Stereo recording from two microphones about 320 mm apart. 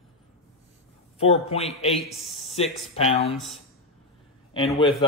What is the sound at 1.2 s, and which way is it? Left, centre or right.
Speech, centre.